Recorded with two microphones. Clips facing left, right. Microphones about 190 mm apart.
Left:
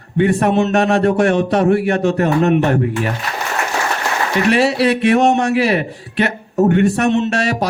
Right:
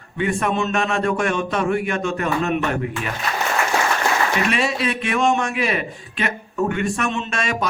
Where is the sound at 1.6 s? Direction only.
35° left (ahead or behind).